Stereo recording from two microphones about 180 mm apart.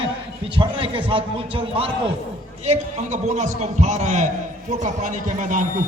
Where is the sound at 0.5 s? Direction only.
30° right (ahead or behind).